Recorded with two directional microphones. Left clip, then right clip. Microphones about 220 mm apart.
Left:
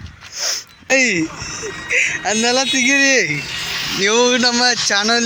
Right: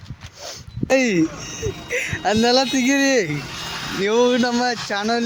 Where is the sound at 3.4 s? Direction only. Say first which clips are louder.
Left 6 dB; 40° right (ahead or behind).